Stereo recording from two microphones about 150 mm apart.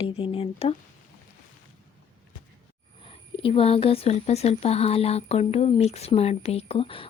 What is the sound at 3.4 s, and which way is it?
Speech, 40° left (ahead or behind).